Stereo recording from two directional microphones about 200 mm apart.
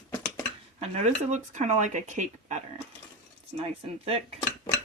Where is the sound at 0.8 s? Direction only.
35° right (ahead or behind).